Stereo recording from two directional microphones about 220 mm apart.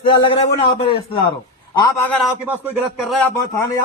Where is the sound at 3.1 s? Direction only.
5° left (ahead or behind).